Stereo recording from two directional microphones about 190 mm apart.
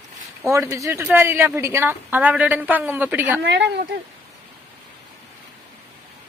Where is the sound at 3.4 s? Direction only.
65° right (ahead or behind).